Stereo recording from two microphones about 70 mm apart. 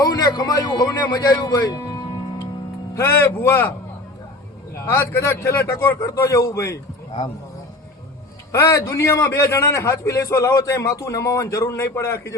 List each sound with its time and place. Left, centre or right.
0.0 s speech: left
1.5 s speech: left
3.0 s speech: left
4.9 s speech: left
6.3 s a man's voice: left
8.5 s speech: left
9.4 s a man's voice: left
11.6 s a man's voice: left